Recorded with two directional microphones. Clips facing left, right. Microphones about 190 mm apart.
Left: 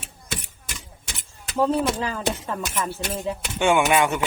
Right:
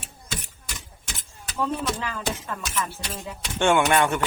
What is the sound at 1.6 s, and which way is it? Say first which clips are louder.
Speech: left 5 dB; 35° left (ahead or behind).